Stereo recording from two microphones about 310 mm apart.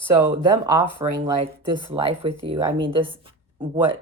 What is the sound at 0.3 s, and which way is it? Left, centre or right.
A woman's voice, centre.